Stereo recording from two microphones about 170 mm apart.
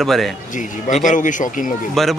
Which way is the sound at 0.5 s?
50° left (ahead or behind).